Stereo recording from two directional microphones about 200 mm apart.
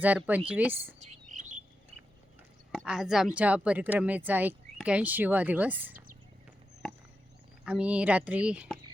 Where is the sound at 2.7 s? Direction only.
Centre (ahead or behind).